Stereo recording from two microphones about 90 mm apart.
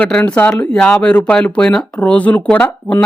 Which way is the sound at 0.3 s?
15° left (ahead or behind).